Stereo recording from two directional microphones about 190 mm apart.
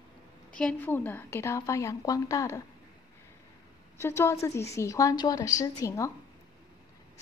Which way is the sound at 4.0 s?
15° left (ahead or behind).